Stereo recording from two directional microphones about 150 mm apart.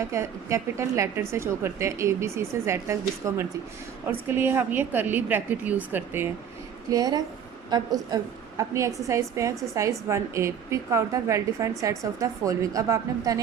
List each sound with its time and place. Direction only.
0.0 s a woman's voice: 20° right (ahead or behind)
6.9 s a woman's voice: 25° right (ahead or behind)